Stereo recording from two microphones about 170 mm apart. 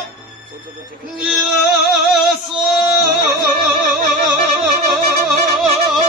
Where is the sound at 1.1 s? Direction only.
5° right (ahead or behind).